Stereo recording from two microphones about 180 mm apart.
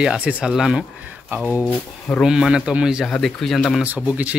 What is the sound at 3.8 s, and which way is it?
Speech, 10° right (ahead or behind).